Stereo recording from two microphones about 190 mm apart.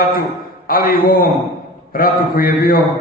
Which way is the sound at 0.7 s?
50° left (ahead or behind).